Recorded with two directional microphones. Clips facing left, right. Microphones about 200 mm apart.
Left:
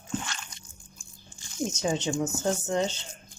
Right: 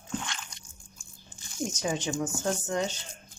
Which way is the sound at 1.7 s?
25° left (ahead or behind).